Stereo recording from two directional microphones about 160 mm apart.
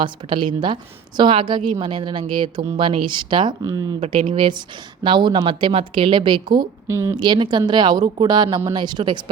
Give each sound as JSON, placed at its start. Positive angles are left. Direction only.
{"t": 0.0, "sound": "a woman's voice", "side_deg": -30}
{"t": 6.8, "sound": "a woman's voice", "side_deg": -15}
{"t": 7.2, "sound": "a woman's voice", "side_deg": -30}